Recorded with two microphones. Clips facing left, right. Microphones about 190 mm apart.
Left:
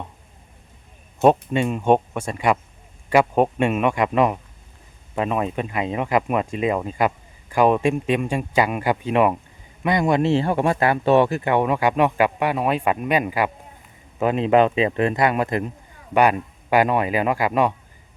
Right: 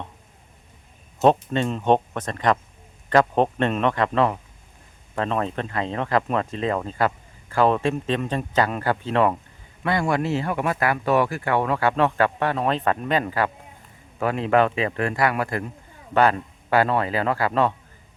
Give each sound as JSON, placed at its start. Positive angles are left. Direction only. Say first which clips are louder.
{"t": 1.2, "sound": "speech", "louder": "left 2 dB", "side_deg": 10}